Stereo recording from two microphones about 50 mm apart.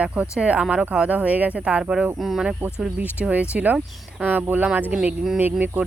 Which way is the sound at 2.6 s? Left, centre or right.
Right.